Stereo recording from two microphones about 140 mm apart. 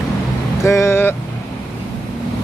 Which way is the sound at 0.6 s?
20° left (ahead or behind).